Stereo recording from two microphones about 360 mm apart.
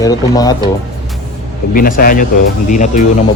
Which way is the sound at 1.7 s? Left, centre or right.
Left.